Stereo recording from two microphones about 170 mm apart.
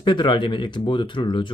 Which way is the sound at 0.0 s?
25° left (ahead or behind).